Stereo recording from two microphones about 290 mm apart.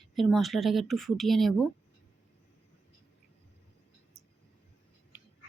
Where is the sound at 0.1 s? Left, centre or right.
Centre.